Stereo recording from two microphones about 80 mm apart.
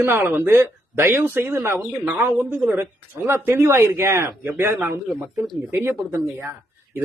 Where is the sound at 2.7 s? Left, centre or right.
Right.